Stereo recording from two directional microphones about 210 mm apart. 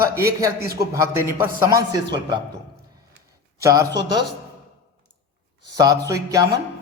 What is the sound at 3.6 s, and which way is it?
Speech, 15° right (ahead or behind).